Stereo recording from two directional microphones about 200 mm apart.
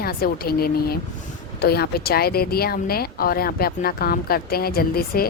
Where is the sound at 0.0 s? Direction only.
50° left (ahead or behind).